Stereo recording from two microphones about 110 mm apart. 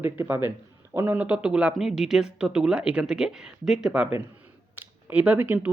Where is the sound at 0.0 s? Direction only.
20° right (ahead or behind).